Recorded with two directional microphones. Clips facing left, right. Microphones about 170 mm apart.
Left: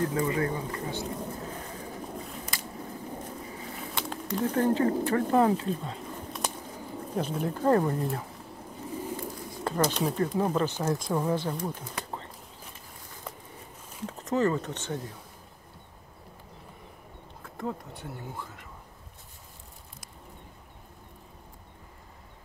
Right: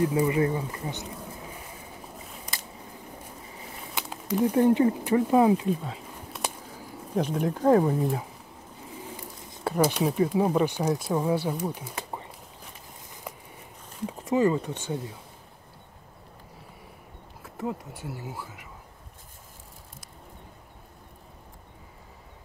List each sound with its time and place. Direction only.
0.0 s speech: 10° right (ahead or behind)
0.4 s speech: 25° right (ahead or behind)
3.9 s speech: 5° right (ahead or behind)
5.9 s a sound: 5° right (ahead or behind)
7.5 s speech: 10° right (ahead or behind)
9.7 s speech: 10° right (ahead or behind)
13.3 s a sound: 10° right (ahead or behind)
14.0 s speech: 10° right (ahead or behind)
17.4 s speech: 5° right (ahead or behind)